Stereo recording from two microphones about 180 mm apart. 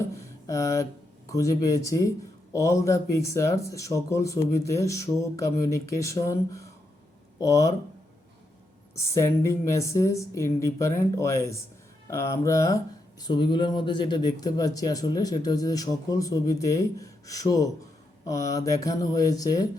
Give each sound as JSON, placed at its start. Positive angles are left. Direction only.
{"t": 0.2, "sound": "a sound", "side_deg": 15}
{"t": 1.3, "sound": "speech", "side_deg": 20}
{"t": 9.0, "sound": "speech", "side_deg": 15}